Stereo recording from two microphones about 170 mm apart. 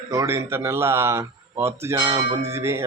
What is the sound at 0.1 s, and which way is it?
Speech, 15° right (ahead or behind).